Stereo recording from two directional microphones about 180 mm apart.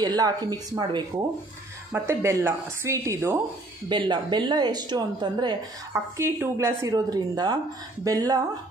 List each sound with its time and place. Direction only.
0.0 s speech: 20° right (ahead or behind)